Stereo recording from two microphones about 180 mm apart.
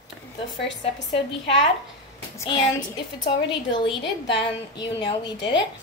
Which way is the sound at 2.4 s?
25° left (ahead or behind).